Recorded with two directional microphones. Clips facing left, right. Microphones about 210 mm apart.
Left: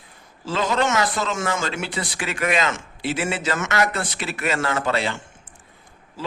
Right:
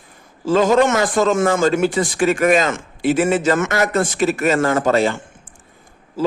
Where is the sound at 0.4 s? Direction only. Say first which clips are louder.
Right 8 dB; 45° right (ahead or behind).